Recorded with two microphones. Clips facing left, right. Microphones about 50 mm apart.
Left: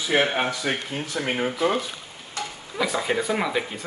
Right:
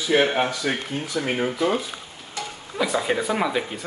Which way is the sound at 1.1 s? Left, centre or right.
Left.